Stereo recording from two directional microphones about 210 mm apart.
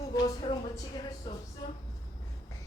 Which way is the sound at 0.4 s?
25° left (ahead or behind).